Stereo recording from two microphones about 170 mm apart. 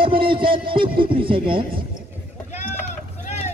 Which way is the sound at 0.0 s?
30° right (ahead or behind).